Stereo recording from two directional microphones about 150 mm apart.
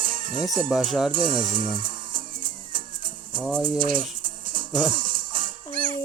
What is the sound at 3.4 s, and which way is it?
Speech, 10° right (ahead or behind).